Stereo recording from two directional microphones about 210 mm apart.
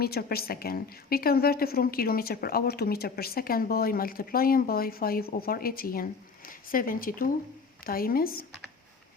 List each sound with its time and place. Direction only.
0.0 s a woman's voice: 45° left (ahead or behind)